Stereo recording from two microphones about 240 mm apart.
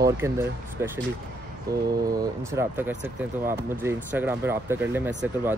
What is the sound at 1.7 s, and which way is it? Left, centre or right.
Speech, right.